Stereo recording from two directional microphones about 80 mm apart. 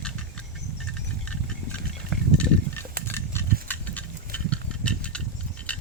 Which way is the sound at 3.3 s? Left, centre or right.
Left.